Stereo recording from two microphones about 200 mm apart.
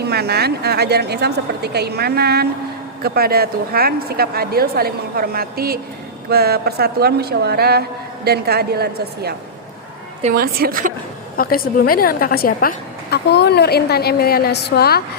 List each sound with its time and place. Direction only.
0.0 s a woman's voice: 55° right (ahead or behind)
11.3 s a woman's voice: 45° left (ahead or behind)